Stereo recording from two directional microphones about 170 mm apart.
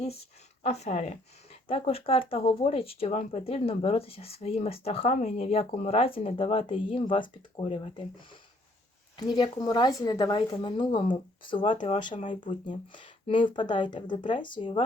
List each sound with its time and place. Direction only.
0.6 s speech: 40° left (ahead or behind)
9.1 s speech: 25° left (ahead or behind)